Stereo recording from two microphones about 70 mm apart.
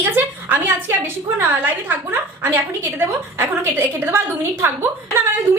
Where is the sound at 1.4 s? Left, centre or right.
Right.